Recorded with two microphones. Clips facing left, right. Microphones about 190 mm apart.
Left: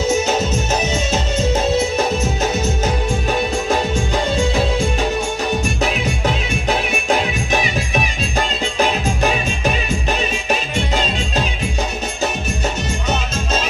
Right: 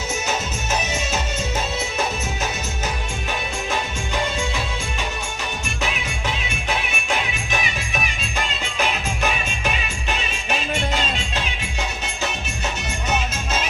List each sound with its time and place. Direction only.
0.3 s music: 35° left (ahead or behind)